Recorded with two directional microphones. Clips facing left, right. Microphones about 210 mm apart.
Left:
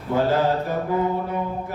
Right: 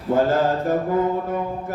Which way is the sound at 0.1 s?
50° right (ahead or behind).